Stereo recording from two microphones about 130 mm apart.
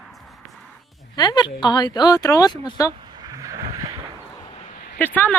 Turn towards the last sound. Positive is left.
turn(degrees=15)  # may be behind; listen again after turning